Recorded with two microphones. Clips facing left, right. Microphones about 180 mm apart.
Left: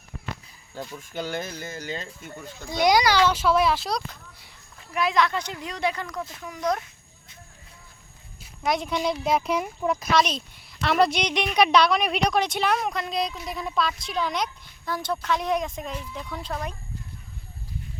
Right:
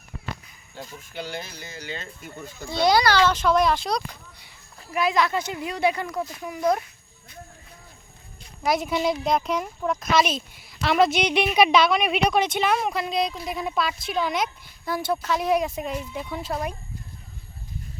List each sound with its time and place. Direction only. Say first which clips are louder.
1.1 s speech: left 3 dB; 45° left (ahead or behind)
2.6 s speech: even; 15° left (ahead or behind); by 6.7 s 5° right (ahead or behind)
8.4 s speech: right 2 dB; centre (ahead or behind)